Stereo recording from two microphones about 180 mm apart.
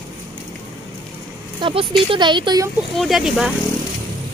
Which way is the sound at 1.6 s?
30° right (ahead or behind).